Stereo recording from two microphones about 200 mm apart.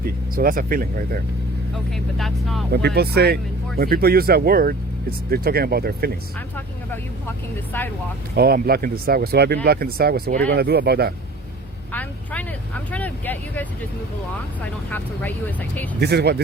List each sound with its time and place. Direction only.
0.0 s speech: 45° right (ahead or behind)
2.1 s speech: centre (ahead or behind)
2.7 s speech: 55° right (ahead or behind)
6.9 s speech: 10° left (ahead or behind)
8.4 s speech: 50° right (ahead or behind)
11.9 s vehicle: 10° left (ahead or behind)
14.6 s speech: 10° left (ahead or behind)
16.0 s speech: 55° right (ahead or behind)